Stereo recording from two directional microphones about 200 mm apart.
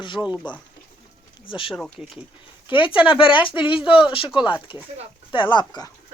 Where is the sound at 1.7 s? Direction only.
Centre (ahead or behind).